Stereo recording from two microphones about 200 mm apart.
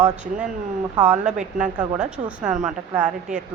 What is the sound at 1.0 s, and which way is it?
A woman's voice, 5° right (ahead or behind).